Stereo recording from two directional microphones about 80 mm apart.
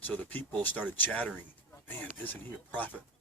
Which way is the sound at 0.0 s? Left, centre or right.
Centre.